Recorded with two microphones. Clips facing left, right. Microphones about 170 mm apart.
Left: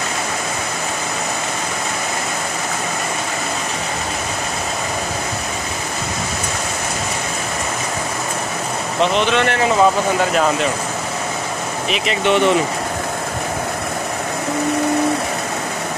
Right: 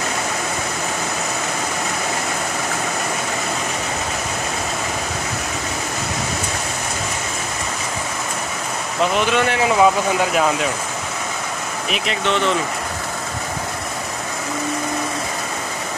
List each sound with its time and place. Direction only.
9.0 s speech: 10° right (ahead or behind)
12.3 s speech: 15° left (ahead or behind)